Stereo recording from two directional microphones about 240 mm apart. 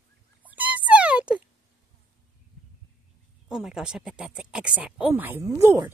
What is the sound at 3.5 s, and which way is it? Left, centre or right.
Speech, centre.